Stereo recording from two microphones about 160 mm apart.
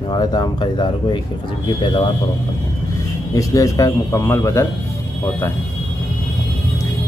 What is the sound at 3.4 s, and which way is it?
Speech, 20° left (ahead or behind).